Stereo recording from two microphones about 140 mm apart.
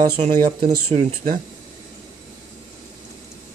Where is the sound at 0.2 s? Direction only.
65° right (ahead or behind).